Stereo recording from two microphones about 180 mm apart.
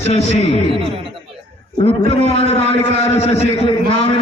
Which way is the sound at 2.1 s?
35° left (ahead or behind).